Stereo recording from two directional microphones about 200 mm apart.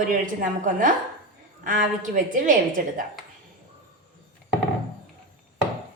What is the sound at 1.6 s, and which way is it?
Speech, 40° right (ahead or behind).